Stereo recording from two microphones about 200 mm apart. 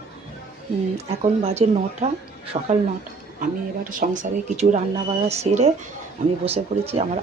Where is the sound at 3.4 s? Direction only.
45° right (ahead or behind).